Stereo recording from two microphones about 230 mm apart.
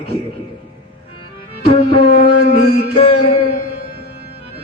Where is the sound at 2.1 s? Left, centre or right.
Left.